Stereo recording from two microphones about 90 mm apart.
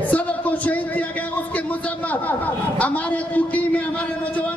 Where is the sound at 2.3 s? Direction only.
20° left (ahead or behind).